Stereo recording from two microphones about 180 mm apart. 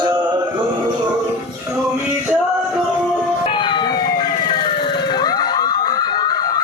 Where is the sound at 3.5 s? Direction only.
25° left (ahead or behind).